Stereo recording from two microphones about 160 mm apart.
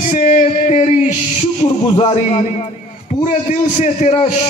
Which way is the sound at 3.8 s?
45° left (ahead or behind).